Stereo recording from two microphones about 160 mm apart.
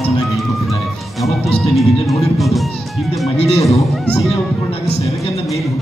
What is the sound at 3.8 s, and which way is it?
Speech, centre (ahead or behind).